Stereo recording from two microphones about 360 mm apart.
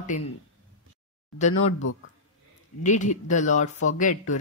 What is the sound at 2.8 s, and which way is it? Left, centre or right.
Speech, centre.